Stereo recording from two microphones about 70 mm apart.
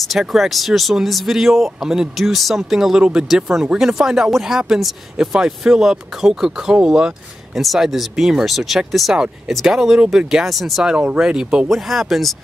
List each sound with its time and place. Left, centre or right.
0.3 s speech: centre
10.9 s speech: centre